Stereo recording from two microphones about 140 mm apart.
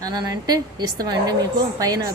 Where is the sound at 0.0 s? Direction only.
30° right (ahead or behind).